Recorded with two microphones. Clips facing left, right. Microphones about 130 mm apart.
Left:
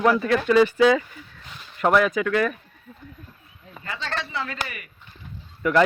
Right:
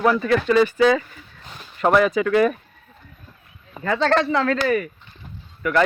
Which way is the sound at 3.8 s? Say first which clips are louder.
Right 13 dB; 90° right.